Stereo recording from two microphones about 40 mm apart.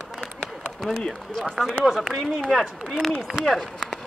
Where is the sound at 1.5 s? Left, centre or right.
Centre.